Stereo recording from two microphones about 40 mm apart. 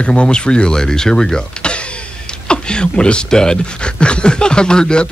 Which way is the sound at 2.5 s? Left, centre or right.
Left.